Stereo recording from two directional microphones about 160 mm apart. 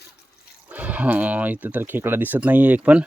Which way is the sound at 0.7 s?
10° right (ahead or behind).